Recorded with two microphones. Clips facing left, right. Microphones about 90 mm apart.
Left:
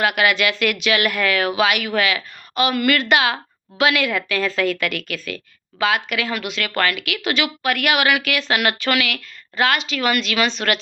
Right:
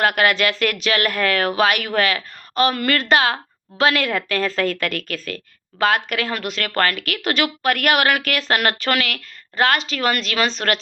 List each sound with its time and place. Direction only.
0.0 s speech: 45° right (ahead or behind)